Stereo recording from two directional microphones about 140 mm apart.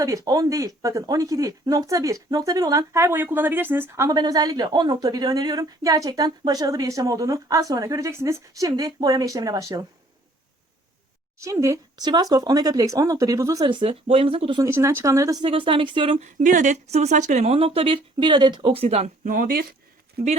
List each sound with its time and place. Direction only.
0.0 s speech: 25° right (ahead or behind)
11.3 s speech: 20° right (ahead or behind)
13.7 s speech: 40° right (ahead or behind)
14.6 s speech: 20° right (ahead or behind)
15.4 s speech: 40° right (ahead or behind)
16.2 s a woman's voice: 65° right (ahead or behind); by 19.6 s 90° right